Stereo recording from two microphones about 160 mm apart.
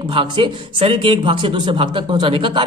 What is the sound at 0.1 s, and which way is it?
Speech, 30° right (ahead or behind).